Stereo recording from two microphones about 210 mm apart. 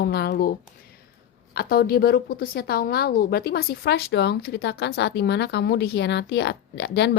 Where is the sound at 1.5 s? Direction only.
45° left (ahead or behind).